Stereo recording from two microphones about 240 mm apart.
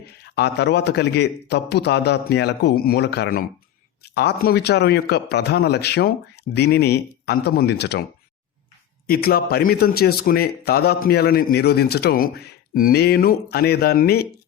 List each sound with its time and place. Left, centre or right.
0.0 s a man's voice: left
9.0 s a man's voice: left